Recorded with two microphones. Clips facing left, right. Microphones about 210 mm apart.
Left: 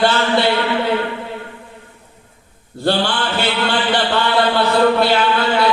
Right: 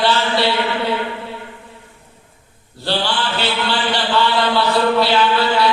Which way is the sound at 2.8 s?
50° left (ahead or behind).